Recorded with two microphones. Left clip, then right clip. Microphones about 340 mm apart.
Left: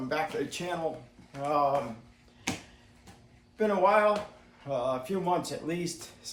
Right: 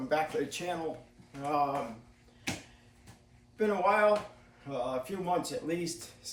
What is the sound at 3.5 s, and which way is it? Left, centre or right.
Speech, centre.